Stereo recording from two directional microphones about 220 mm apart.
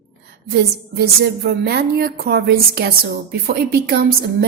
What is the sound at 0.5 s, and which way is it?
A woman's voice, 45° right (ahead or behind).